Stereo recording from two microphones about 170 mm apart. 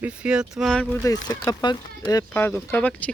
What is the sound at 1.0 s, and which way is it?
Speech, 20° left (ahead or behind).